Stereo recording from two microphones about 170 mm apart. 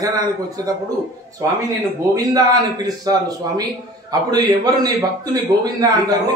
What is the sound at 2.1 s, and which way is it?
A man's voice, 20° right (ahead or behind).